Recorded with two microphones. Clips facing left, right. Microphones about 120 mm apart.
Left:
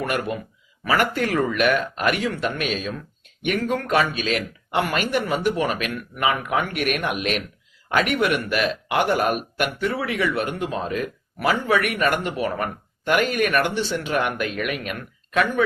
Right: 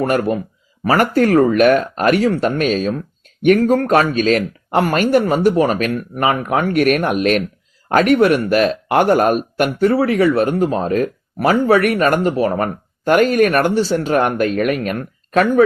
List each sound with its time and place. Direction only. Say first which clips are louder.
0.0 s speech: right 8 dB; 40° right (ahead or behind)